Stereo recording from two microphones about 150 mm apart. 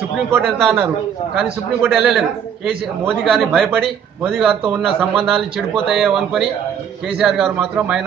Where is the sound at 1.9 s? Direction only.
Centre (ahead or behind).